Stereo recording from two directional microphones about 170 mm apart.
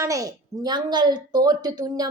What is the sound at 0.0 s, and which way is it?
A woman's voice, 20° right (ahead or behind).